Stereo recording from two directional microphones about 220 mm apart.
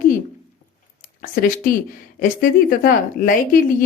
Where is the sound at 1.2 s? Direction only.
40° left (ahead or behind).